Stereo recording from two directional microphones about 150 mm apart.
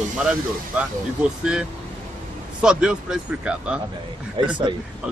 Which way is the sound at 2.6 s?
5° right (ahead or behind).